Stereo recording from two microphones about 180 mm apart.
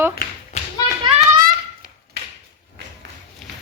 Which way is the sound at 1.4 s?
55° right (ahead or behind).